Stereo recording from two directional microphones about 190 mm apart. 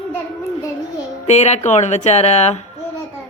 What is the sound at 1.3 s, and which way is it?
Speech, 35° left (ahead or behind).